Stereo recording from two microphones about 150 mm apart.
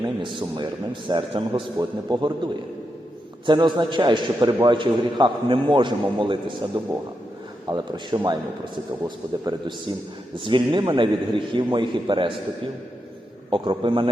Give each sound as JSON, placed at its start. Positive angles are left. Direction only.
{"t": 0.0, "sound": "a man's voice", "side_deg": -30}
{"t": 3.4, "sound": "a man's voice", "side_deg": -30}
{"t": 13.5, "sound": "a man's voice", "side_deg": -35}